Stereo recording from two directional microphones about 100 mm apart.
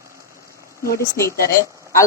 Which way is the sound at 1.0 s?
30° left (ahead or behind).